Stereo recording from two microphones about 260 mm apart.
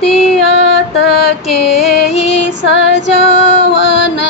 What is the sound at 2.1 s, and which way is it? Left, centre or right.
Music, left.